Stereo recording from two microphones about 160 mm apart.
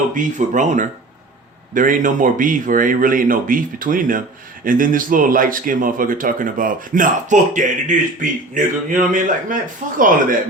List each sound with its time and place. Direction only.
0.1 s speech: 50° right (ahead or behind)